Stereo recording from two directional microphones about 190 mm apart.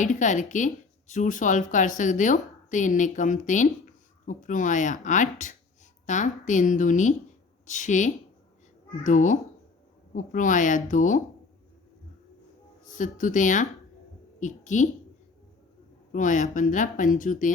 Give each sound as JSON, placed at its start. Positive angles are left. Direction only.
{"t": 0.0, "sound": "speech", "side_deg": 40}
{"t": 12.8, "sound": "speech", "side_deg": 40}
{"t": 16.1, "sound": "speech", "side_deg": 40}